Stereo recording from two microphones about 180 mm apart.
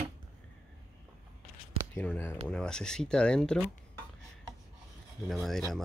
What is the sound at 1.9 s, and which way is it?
Speech, 10° left (ahead or behind).